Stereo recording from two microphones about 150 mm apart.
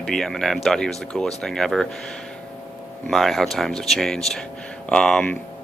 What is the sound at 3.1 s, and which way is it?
Speech, centre (ahead or behind).